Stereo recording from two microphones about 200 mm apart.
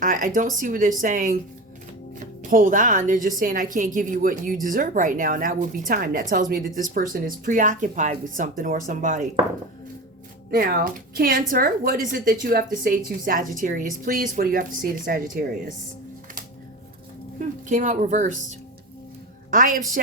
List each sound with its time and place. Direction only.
0.0 s a woman's voice: 40° right (ahead or behind)
10.5 s a woman's voice: 45° right (ahead or behind)
17.7 s a woman's voice: 40° right (ahead or behind)